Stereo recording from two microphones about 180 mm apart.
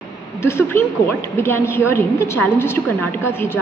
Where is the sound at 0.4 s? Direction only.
15° left (ahead or behind).